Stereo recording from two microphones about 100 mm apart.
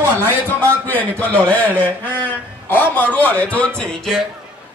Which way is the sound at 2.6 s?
20° left (ahead or behind).